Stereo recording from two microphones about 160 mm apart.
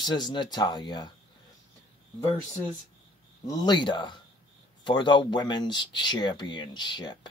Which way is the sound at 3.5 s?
25° left (ahead or behind).